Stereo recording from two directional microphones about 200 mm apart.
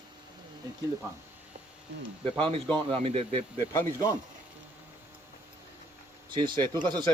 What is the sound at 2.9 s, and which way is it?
Speech, 30° right (ahead or behind).